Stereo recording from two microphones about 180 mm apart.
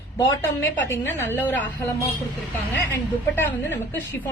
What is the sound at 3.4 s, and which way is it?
Speech, 10° left (ahead or behind).